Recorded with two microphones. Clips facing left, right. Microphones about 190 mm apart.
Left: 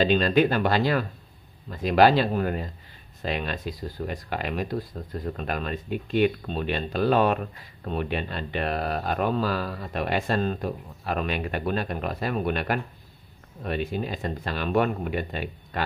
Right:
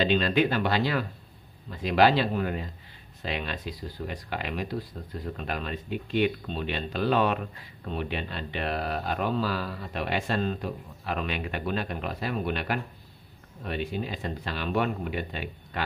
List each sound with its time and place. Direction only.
0.0 s speech: 45° left (ahead or behind)